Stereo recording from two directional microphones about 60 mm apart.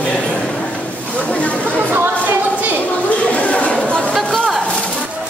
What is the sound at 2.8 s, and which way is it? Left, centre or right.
Chatter, left.